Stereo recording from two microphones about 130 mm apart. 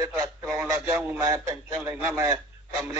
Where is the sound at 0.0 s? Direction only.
25° right (ahead or behind).